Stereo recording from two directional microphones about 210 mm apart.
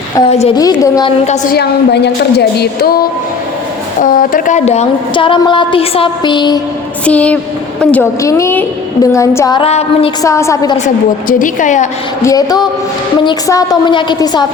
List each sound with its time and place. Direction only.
0.2 s a woman's voice: 30° left (ahead or behind)
0.5 s a woman's voice: 20° left (ahead or behind)
1.2 s a woman's voice: 35° left (ahead or behind)
1.5 s a woman's voice: 50° left (ahead or behind); by 6.6 s 20° left (ahead or behind)
7.0 s a woman's voice: 5° left (ahead or behind); by 10.1 s 30° left (ahead or behind)
10.2 s a woman's voice: 15° left (ahead or behind)
10.8 s a woman's voice: 40° left (ahead or behind)
12.2 s a woman's voice: 15° left (ahead or behind)